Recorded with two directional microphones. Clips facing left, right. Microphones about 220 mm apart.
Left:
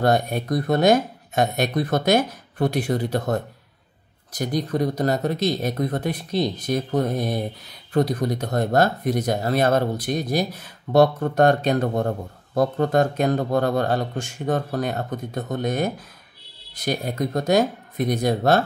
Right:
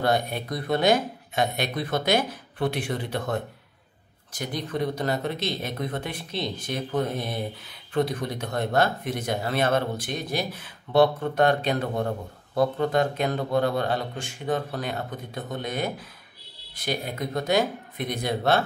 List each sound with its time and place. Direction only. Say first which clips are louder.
0.0 s speech: left 4 dB; 45° left (ahead or behind)